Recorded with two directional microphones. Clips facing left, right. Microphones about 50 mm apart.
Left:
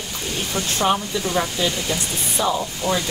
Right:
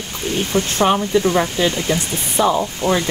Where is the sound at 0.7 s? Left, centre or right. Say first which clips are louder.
Right 5 dB; right.